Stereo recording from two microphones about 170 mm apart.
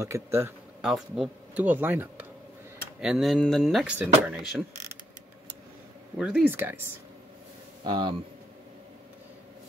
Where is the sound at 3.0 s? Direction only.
Centre (ahead or behind).